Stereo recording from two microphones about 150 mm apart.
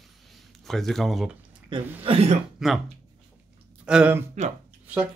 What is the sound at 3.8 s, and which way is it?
Speech, 5° right (ahead or behind).